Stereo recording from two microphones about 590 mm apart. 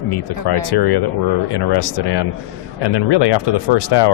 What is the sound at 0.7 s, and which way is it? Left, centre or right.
Speech, left.